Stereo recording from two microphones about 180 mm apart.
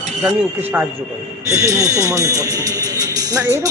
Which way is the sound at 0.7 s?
10° right (ahead or behind).